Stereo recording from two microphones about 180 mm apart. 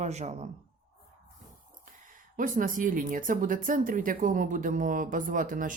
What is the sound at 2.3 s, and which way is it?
Speech, 50° right (ahead or behind).